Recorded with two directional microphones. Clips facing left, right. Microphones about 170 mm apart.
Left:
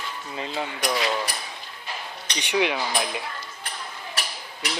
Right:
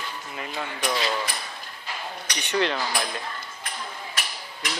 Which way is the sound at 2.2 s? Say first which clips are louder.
Left 1 dB; 15° left (ahead or behind).